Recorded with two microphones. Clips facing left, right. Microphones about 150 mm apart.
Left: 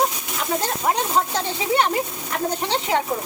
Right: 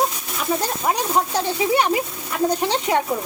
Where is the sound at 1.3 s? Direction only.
10° right (ahead or behind).